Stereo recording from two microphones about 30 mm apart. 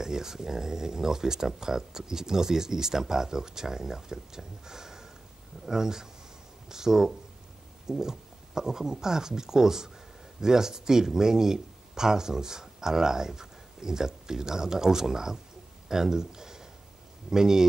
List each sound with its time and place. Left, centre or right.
0.0 s speech: centre